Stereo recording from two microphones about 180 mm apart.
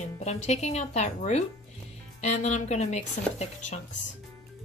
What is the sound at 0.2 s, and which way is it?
Speech, 40° left (ahead or behind).